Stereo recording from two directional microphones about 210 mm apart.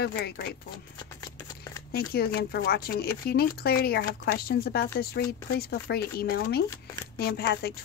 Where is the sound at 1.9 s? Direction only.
50° left (ahead or behind).